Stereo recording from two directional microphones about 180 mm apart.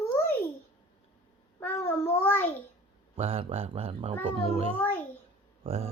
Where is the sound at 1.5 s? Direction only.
10° left (ahead or behind).